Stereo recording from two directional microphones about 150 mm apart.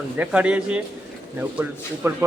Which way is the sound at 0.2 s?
10° right (ahead or behind).